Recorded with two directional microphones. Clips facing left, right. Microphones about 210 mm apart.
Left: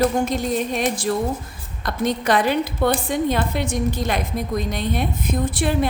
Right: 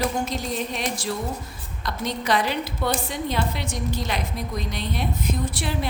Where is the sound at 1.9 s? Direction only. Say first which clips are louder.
Left 5 dB; 50° left (ahead or behind).